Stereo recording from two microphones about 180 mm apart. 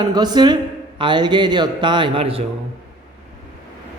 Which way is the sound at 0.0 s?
25° right (ahead or behind).